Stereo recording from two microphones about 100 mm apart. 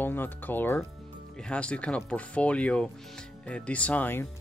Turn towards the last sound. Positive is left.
turn(degrees=20)  # may be behind; listen again after turning